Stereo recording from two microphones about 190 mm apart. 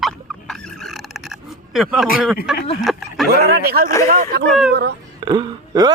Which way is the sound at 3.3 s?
55° right (ahead or behind).